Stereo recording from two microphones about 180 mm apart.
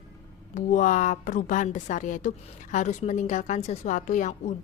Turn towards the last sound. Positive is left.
turn(degrees=40)  # may be behind; listen again after turning